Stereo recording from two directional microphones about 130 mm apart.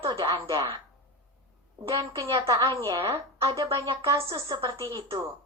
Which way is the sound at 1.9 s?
30° right (ahead or behind).